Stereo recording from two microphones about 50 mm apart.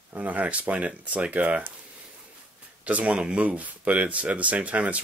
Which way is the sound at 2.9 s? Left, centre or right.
Right.